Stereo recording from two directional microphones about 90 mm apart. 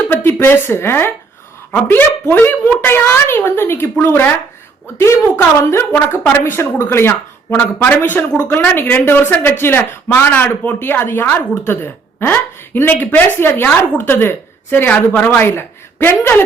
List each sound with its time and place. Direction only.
0.1 s speech: 20° left (ahead or behind)